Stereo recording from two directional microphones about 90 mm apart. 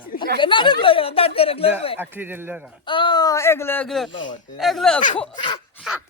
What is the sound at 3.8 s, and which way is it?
Speech, centre (ahead or behind).